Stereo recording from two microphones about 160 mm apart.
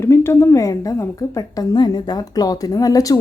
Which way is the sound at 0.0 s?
15° left (ahead or behind).